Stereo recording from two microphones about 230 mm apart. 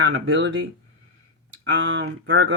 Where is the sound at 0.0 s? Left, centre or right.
Right.